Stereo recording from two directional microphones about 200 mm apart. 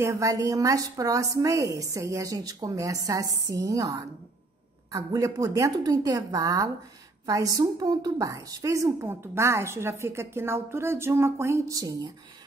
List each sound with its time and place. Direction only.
0.0 s a woman's voice: 15° right (ahead or behind)